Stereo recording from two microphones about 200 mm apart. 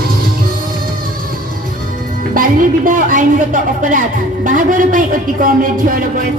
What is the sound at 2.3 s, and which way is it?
A woman's voice, 45° right (ahead or behind).